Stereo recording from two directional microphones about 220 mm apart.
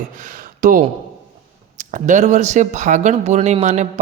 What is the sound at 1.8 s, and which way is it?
Speech, 35° right (ahead or behind).